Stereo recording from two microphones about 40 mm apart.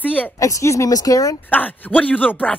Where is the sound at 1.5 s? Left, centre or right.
Left.